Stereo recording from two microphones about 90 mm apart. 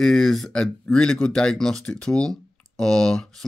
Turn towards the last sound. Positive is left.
turn(degrees=5)  # may be behind; listen again after turning